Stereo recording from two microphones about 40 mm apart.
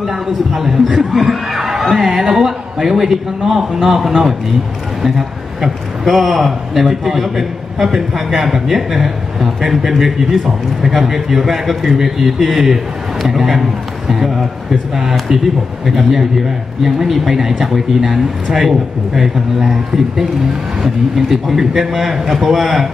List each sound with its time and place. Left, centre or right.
0.0 s a man's voice: centre
5.6 s a man's voice: centre